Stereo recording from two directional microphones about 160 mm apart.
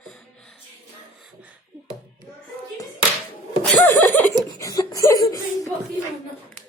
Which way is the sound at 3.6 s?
10° left (ahead or behind).